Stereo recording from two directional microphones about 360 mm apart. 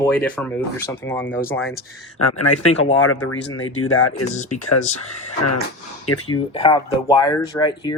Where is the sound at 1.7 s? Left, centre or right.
Left.